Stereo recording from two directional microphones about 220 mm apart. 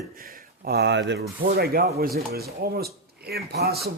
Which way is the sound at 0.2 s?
40° right (ahead or behind).